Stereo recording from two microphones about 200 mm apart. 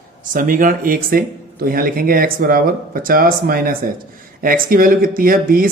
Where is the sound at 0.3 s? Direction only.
45° right (ahead or behind).